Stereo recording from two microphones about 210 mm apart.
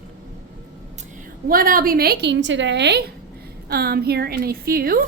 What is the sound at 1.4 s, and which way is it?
A woman's voice, 40° right (ahead or behind).